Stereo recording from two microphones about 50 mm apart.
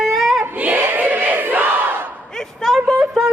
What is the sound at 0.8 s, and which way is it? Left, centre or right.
Crowd, right.